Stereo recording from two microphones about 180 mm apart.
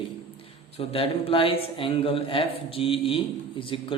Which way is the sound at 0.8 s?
30° left (ahead or behind).